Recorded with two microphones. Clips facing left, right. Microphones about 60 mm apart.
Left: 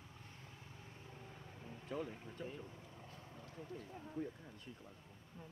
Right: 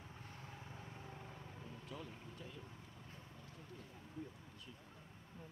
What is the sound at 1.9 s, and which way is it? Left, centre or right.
Speech, left.